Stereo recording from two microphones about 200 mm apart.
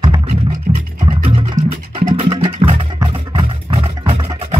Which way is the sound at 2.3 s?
25° right (ahead or behind).